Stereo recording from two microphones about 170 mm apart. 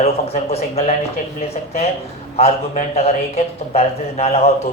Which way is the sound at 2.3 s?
40° left (ahead or behind).